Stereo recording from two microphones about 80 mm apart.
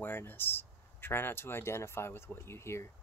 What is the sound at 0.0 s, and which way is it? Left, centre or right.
Speech, left.